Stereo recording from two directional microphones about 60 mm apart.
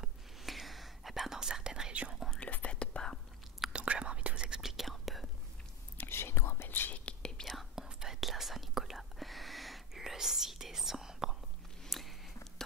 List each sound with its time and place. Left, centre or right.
0.0 s whispering: centre
2.1 s whispering: centre
2.4 s whispering: left
3.7 s whispering: centre
4.6 s whispering: centre
6.0 s whispering: left
7.1 s whispering: centre
7.7 s whispering: centre
11.8 s a sound: centre